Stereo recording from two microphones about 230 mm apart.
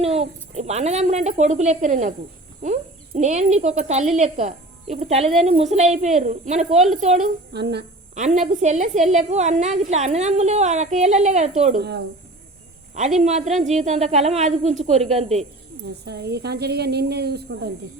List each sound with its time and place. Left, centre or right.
0.0 s a woman's voice: right
7.5 s a woman's voice: right
8.1 s a woman's voice: right
13.1 s speech: right
16.0 s a woman's voice: right